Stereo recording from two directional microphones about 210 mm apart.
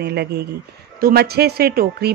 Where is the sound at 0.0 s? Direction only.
50° right (ahead or behind).